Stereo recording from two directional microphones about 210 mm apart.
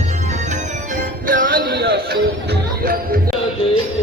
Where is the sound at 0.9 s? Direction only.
40° right (ahead or behind).